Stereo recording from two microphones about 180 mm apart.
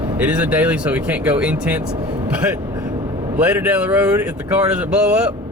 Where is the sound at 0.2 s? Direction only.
5° right (ahead or behind).